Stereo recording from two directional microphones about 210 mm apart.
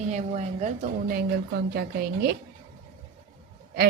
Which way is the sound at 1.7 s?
45° right (ahead or behind).